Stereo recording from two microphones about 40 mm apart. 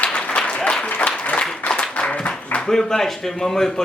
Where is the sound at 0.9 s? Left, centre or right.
Left.